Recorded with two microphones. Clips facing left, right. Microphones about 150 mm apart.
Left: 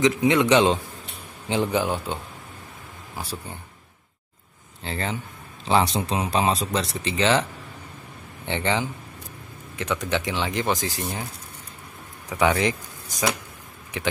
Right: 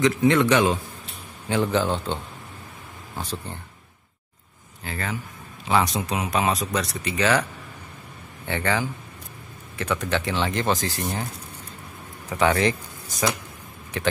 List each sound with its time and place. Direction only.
0.0 s speech: 15° left (ahead or behind)
3.2 s speech: 10° left (ahead or behind)
4.8 s speech: 30° left (ahead or behind)
8.5 s speech: 20° left (ahead or behind)
12.3 s speech: 15° left (ahead or behind)